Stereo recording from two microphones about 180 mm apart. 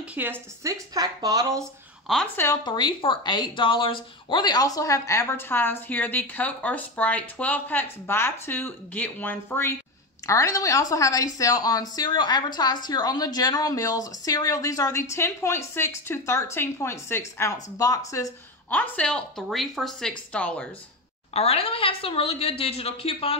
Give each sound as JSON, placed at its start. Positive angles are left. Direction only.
{"t": 0.1, "sound": "a woman's voice", "side_deg": -10}
{"t": 1.6, "sound": "speech", "side_deg": 0}
{"t": 2.4, "sound": "speech", "side_deg": 25}
{"t": 21.3, "sound": "a woman's voice", "side_deg": 35}